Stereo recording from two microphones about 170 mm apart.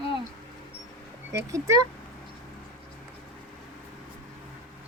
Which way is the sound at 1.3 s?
20° right (ahead or behind).